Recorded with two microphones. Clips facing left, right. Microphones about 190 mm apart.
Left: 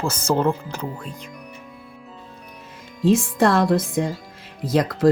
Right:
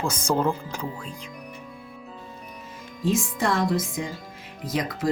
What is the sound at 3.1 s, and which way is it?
Speech, 60° left (ahead or behind).